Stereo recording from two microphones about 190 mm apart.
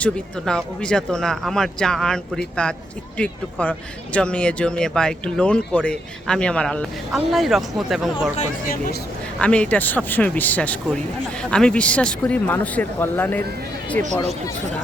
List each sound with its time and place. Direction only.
0.0 s speech: 5° left (ahead or behind)
8.4 s speech: 50° left (ahead or behind)
9.4 s speech: 5° left (ahead or behind)